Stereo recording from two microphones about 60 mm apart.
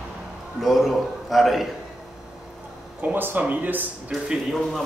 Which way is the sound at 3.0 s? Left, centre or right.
Right.